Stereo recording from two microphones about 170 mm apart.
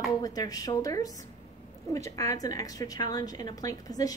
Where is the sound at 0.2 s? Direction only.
20° left (ahead or behind).